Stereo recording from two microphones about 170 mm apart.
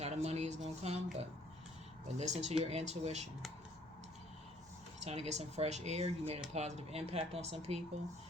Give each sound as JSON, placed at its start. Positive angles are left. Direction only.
{"t": 0.0, "sound": "a sound", "side_deg": -40}
{"t": 2.0, "sound": "speech", "side_deg": -45}
{"t": 5.0, "sound": "speech", "side_deg": -40}